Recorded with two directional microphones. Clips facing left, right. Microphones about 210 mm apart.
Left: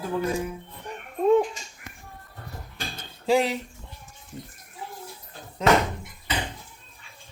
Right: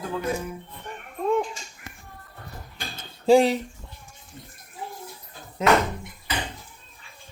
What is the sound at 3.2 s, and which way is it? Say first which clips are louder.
Speech: right 5 dB; 30° right (ahead or behind).